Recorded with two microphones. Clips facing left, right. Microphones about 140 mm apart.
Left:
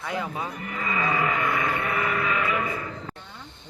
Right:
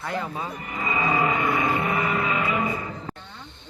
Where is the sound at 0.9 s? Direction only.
15° right (ahead or behind).